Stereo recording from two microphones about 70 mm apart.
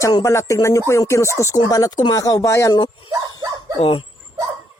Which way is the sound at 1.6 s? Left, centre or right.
Left.